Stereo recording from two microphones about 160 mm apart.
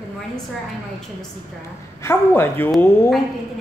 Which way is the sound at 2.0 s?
15° left (ahead or behind).